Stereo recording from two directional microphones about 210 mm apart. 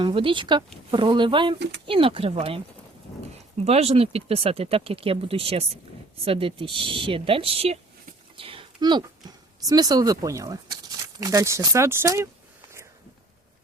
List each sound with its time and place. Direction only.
0.0 s speech: 25° right (ahead or behind)
3.6 s speech: 30° right (ahead or behind)
8.4 s a sound: 25° right (ahead or behind)
9.6 s speech: 15° right (ahead or behind)